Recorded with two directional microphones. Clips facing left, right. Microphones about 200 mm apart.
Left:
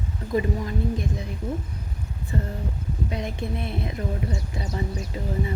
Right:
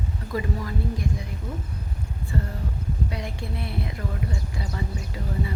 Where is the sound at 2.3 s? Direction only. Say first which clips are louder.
Left 1 dB; 20° left (ahead or behind).